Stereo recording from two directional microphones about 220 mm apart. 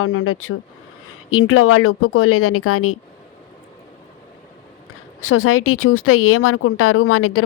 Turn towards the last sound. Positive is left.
turn(degrees=75)  # may be behind; listen again after turning